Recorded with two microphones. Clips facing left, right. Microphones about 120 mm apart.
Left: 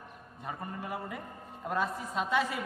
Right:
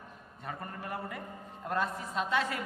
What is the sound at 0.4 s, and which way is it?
A woman's voice, 5° left (ahead or behind).